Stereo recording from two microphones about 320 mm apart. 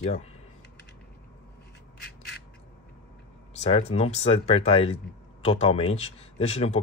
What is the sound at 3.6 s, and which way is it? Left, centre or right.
Speech, centre.